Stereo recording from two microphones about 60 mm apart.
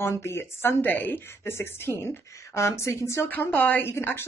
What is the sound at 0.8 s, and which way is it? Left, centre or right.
Speech, left.